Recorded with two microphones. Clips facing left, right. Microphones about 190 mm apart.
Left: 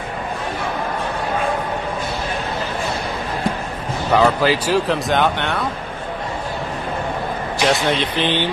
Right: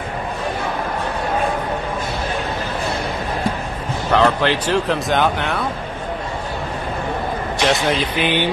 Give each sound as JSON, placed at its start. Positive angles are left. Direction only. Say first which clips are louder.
{"t": 4.1, "sound": "speech", "louder": "left 1 dB", "side_deg": 5}
{"t": 7.6, "sound": "speech", "louder": "even", "side_deg": 0}